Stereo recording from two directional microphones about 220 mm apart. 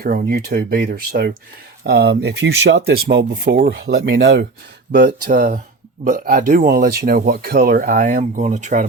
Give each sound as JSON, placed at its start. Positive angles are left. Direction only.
{"t": 0.0, "sound": "speech", "side_deg": -45}
{"t": 4.9, "sound": "speech", "side_deg": -40}